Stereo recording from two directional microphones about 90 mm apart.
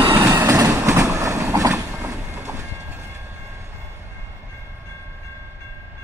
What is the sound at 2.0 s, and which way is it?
Train, 25° right (ahead or behind).